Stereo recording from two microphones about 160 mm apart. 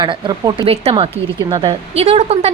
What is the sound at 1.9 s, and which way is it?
Speech, 40° right (ahead or behind).